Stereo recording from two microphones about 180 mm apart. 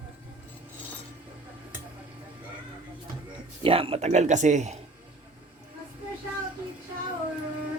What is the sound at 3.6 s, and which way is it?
Speech, 30° right (ahead or behind).